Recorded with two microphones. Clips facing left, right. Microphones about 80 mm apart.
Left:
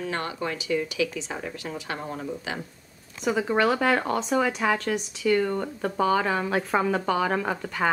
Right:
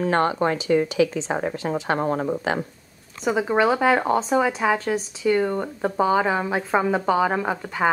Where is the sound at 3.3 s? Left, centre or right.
Centre.